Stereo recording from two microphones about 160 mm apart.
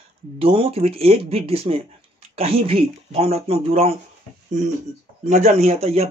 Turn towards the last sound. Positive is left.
turn(degrees=-40)  # may be behind; listen again after turning